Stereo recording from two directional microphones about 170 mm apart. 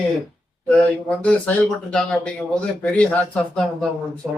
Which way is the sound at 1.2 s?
5° left (ahead or behind).